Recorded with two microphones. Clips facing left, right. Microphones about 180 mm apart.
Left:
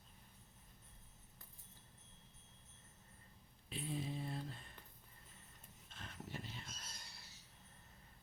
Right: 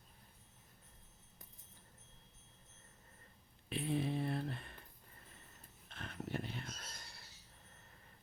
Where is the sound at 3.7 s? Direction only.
65° right (ahead or behind).